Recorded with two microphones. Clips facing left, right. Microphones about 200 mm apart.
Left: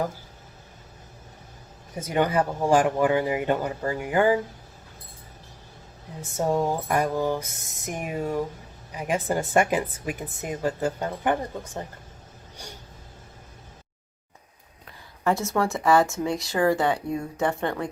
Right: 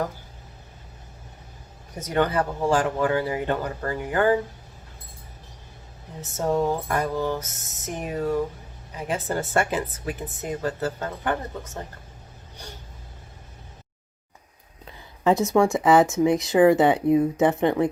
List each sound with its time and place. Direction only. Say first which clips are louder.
2.0 s a woman's voice: even; 10° left (ahead or behind)
6.3 s a woman's voice: right 1 dB; 15° left (ahead or behind)
15.2 s speech: right 5 dB; 20° right (ahead or behind)